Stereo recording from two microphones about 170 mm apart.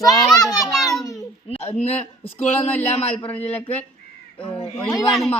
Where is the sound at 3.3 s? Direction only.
10° left (ahead or behind).